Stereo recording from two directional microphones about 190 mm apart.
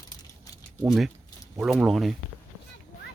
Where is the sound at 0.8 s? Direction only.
Centre (ahead or behind).